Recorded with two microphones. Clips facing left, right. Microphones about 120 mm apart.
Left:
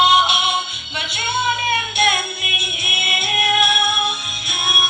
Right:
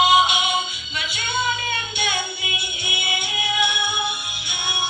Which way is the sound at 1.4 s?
60° left (ahead or behind).